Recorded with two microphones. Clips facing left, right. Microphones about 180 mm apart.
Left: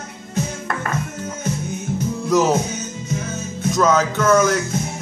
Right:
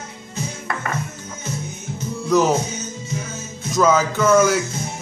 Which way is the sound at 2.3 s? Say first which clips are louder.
Even; centre (ahead or behind).